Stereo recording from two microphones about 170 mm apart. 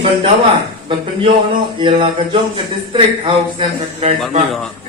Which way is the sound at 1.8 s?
30° right (ahead or behind).